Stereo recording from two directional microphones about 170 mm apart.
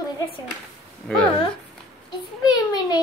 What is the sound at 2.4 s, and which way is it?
Speech, 25° left (ahead or behind).